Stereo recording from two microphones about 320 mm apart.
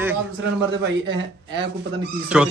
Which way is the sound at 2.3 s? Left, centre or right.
Centre.